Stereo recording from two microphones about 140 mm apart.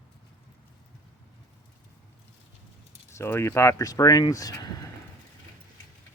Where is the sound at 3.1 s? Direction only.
20° left (ahead or behind).